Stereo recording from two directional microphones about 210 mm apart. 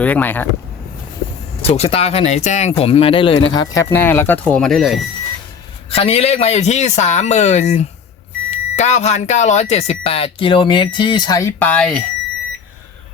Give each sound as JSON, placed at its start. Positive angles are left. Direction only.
{"t": 0.0, "sound": "speech", "side_deg": 10}
{"t": 1.6, "sound": "speech", "side_deg": 30}
{"t": 5.9, "sound": "speech", "side_deg": 30}